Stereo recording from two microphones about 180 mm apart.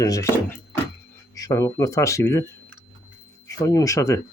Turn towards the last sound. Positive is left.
turn(degrees=15)  # may be behind; listen again after turning